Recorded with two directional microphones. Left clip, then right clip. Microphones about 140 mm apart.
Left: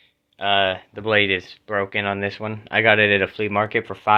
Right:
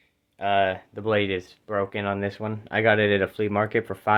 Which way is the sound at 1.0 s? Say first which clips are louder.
Left 5 dB; 10° right (ahead or behind).